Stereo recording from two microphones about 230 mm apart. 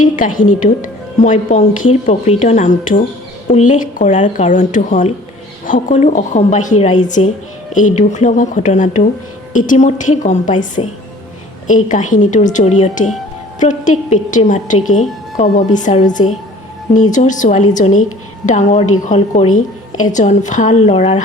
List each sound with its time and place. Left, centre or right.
0.0 s a woman's voice: left